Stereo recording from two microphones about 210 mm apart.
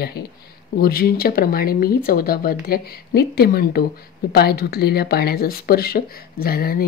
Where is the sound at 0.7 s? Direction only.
45° left (ahead or behind).